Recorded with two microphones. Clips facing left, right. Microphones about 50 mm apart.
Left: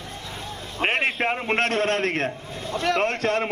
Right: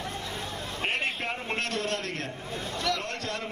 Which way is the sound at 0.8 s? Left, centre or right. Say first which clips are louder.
Left 8 dB; left.